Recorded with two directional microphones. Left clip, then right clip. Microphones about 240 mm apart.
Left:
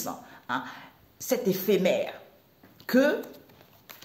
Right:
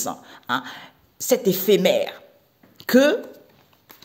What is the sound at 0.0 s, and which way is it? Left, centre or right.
A woman's voice, right.